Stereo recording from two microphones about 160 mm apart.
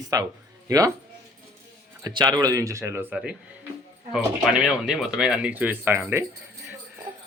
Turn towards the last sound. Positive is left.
turn(degrees=-15)  # may be behind; listen again after turning